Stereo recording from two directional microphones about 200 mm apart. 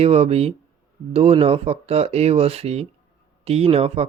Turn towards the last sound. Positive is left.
turn(degrees=-30)  # may be behind; listen again after turning